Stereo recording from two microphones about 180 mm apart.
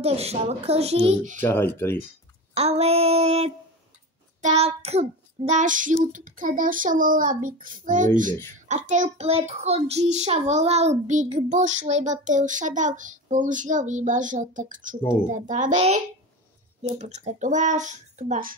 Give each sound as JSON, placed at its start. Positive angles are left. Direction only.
{"t": 0.0, "sound": "a child's voice", "side_deg": -35}
{"t": 1.4, "sound": "speech", "side_deg": 10}
{"t": 2.5, "sound": "a child's voice", "side_deg": -35}
{"t": 4.4, "sound": "child singing", "side_deg": -35}
{"t": 6.1, "sound": "a child's voice", "side_deg": -50}